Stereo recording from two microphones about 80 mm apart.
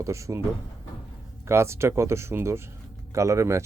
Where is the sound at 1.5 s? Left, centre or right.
Right.